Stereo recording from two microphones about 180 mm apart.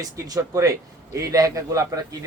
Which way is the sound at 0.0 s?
20° right (ahead or behind).